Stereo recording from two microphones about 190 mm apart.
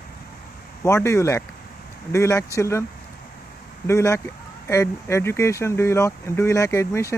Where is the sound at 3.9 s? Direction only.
15° left (ahead or behind).